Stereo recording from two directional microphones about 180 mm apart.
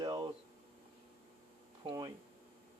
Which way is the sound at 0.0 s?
25° right (ahead or behind).